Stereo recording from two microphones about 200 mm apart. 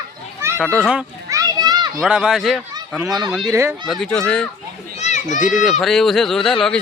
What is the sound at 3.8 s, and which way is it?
Speech, centre (ahead or behind).